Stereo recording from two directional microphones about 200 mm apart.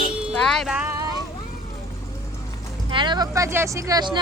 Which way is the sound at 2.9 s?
25° right (ahead or behind).